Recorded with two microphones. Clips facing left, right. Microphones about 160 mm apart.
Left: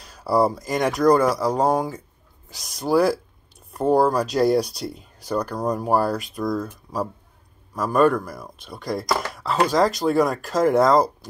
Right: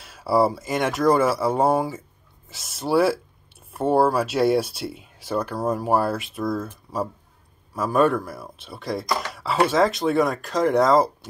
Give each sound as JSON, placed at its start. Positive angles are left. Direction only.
{"t": 0.0, "sound": "speech", "side_deg": -5}
{"t": 9.3, "sound": "a sound", "side_deg": -5}
{"t": 9.7, "sound": "speech", "side_deg": 0}